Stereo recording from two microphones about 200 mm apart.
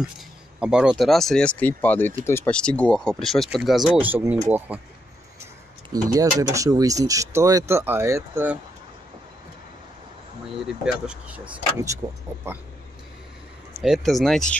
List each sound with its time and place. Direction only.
0.6 s speech: 5° right (ahead or behind)
6.1 s speech: 15° right (ahead or behind)
10.7 s speech: 5° right (ahead or behind)
11.4 s speech: 15° right (ahead or behind)
13.8 s speech: centre (ahead or behind)